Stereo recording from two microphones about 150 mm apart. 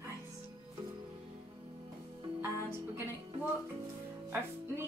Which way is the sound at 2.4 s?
15° right (ahead or behind).